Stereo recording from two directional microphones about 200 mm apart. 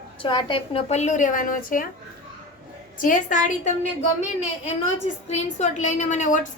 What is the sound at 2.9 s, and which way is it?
A woman's voice, 40° left (ahead or behind).